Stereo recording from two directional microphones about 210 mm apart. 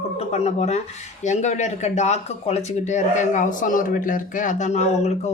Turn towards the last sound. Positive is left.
turn(degrees=30)  # may be behind; listen again after turning